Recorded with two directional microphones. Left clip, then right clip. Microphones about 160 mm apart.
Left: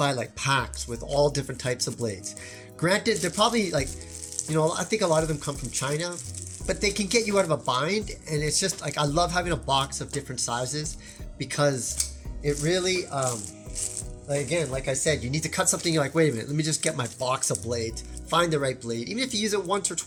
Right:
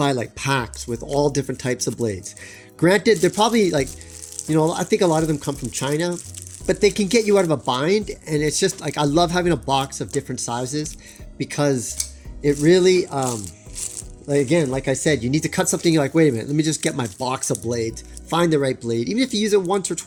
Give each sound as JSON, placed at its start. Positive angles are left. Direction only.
{"t": 0.0, "sound": "speech", "side_deg": -45}
{"t": 12.4, "sound": "speech", "side_deg": -55}
{"t": 14.3, "sound": "speech", "side_deg": -65}